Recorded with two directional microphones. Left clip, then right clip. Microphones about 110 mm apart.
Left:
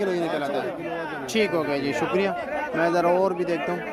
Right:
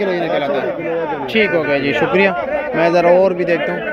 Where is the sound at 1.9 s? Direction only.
15° left (ahead or behind).